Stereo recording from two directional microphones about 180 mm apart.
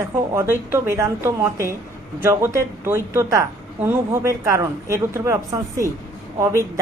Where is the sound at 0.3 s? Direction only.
15° right (ahead or behind).